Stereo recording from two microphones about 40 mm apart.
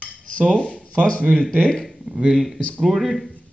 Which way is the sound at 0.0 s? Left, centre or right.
Left.